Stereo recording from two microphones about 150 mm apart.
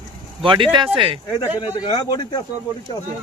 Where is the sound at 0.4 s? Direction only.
35° right (ahead or behind).